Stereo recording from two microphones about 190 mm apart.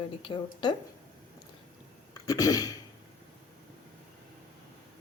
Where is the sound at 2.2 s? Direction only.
20° left (ahead or behind).